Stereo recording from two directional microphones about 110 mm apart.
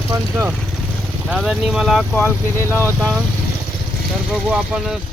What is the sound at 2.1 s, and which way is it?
Speech, 20° left (ahead or behind).